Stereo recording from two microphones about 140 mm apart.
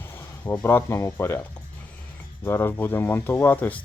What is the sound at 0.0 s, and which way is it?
Speech, 15° left (ahead or behind).